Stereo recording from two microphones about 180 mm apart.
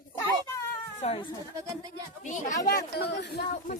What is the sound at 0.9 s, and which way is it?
Speech, 35° left (ahead or behind).